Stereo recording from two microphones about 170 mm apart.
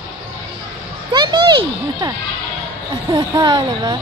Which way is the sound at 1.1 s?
25° right (ahead or behind).